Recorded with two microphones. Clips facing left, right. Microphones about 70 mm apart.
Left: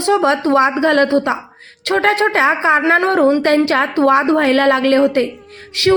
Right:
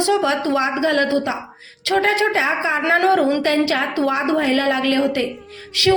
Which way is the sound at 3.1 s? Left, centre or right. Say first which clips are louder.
Left 4 dB; left.